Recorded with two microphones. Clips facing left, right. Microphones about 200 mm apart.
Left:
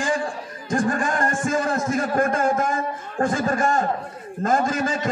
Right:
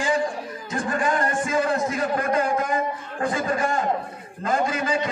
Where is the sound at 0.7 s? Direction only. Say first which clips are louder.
Left 2 dB; 45° left (ahead or behind).